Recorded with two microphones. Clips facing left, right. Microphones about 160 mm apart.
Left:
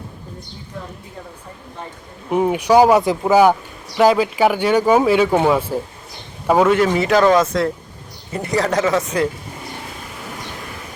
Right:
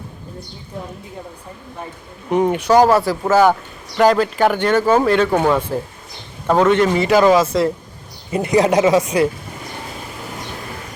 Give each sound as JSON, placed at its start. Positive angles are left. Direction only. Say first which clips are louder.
{"t": 2.3, "sound": "speech", "louder": "even", "side_deg": 5}
{"t": 8.3, "sound": "a woman's voice", "louder": "right 5 dB", "side_deg": -20}